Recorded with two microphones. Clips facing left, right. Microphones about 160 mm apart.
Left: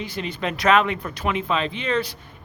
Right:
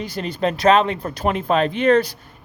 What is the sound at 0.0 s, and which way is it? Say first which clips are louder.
Speech: right 5 dB; 40° right (ahead or behind).